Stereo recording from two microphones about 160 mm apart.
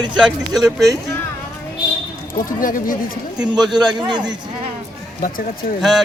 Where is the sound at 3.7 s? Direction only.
25° right (ahead or behind).